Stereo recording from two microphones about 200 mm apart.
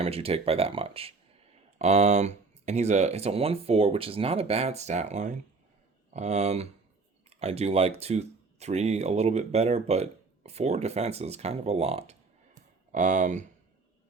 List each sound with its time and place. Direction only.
0.0 s speech: 30° right (ahead or behind)